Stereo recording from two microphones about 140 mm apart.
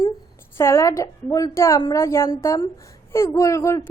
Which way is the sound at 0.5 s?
20° left (ahead or behind).